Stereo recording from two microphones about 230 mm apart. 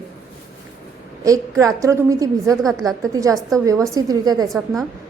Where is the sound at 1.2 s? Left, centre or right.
Centre.